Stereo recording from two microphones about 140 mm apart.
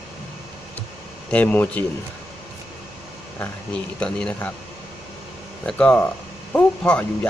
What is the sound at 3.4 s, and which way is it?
Speech, 5° left (ahead or behind).